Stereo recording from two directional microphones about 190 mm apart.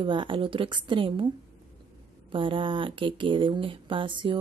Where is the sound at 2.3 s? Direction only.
25° right (ahead or behind).